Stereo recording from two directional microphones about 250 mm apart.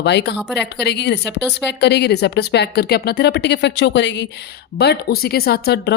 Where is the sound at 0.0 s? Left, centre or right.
Left.